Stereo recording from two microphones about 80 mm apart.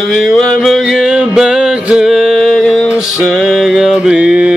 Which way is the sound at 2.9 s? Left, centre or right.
Centre.